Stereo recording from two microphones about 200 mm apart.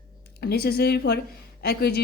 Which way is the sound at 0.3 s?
50° left (ahead or behind).